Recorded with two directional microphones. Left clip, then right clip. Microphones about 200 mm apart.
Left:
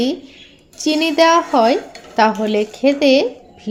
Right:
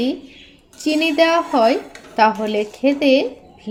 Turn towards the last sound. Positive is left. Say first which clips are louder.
# left 4 dB
turn(degrees=15)  # may be behind; listen again after turning